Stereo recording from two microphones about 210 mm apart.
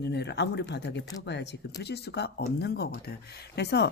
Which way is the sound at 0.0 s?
55° left (ahead or behind).